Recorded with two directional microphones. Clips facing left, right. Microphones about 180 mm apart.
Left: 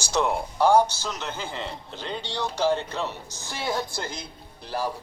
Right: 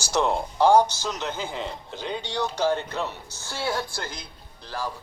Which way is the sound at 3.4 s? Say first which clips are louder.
Even; 15° left (ahead or behind).